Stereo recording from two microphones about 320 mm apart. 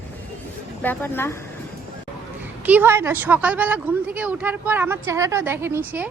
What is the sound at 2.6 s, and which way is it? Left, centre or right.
A woman's voice, centre.